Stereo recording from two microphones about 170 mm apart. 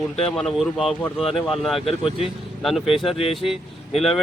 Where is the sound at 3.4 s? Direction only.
35° left (ahead or behind).